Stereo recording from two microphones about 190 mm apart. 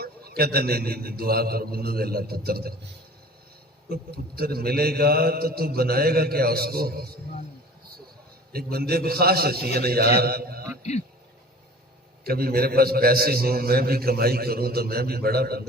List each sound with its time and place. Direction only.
0.0 s a man's voice: 55° right (ahead or behind)
3.8 s a man's voice: 55° right (ahead or behind)
8.5 s a man's voice: 55° right (ahead or behind)
12.2 s a man's voice: 55° right (ahead or behind)